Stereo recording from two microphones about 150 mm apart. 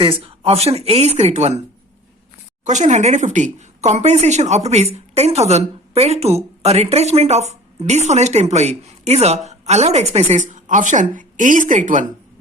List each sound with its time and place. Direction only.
0.0 s speech: 35° right (ahead or behind)
2.6 s a woman's voice: 55° right (ahead or behind)